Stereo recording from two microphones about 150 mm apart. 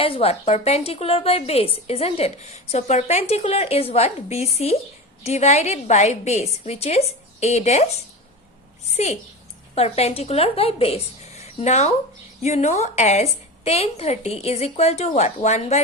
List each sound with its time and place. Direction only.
0.0 s a woman's voice: 40° left (ahead or behind)